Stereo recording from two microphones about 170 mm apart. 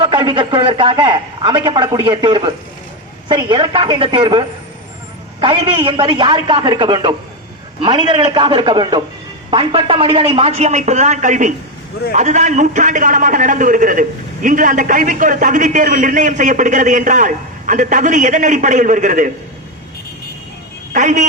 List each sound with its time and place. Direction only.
0.0 s a man's voice: 25° right (ahead or behind); by 19.3 s 50° right (ahead or behind)
20.9 s a man's voice: 45° right (ahead or behind)